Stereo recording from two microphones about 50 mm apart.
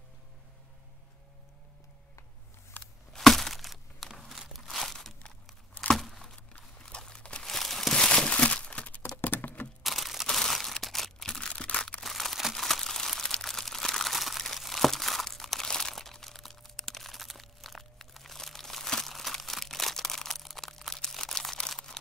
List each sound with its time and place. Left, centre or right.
2.8 s a sound: left
3.1 s a sound: centre
4.6 s crumpling: centre
6.9 s crumpling: centre
7.4 s crumpling: centre; by 9.0 s left
9.1 s typing: left
9.8 s a sound: centre
11.6 s crushing: left
12.0 s crumpling: centre
21.5 s camera: centre